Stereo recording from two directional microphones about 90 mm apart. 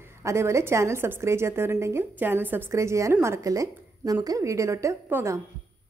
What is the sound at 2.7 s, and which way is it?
Speech, 35° right (ahead or behind).